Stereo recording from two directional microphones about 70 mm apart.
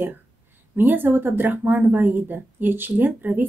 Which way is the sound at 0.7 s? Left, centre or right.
Right.